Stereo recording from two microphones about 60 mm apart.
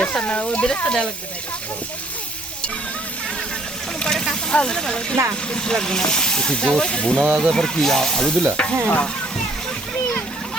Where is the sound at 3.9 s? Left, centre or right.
Centre.